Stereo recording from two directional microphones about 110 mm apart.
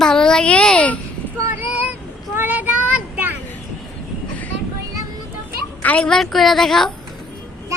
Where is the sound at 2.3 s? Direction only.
15° right (ahead or behind).